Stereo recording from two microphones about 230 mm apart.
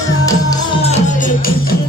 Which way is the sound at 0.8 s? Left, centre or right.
Left.